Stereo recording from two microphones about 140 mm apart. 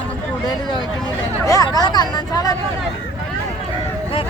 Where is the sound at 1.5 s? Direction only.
25° left (ahead or behind).